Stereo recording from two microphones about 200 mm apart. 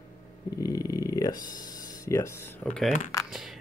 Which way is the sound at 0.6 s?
15° left (ahead or behind).